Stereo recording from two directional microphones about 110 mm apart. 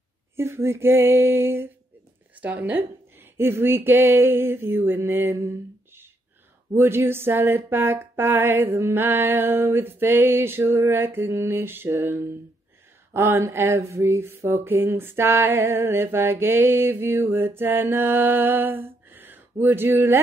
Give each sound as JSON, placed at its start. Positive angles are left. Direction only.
{"t": 0.4, "sound": "mantra", "side_deg": -25}
{"t": 6.7, "sound": "mantra", "side_deg": -20}